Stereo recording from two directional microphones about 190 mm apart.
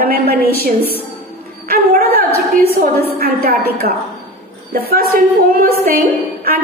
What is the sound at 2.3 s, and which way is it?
Speech, 30° left (ahead or behind).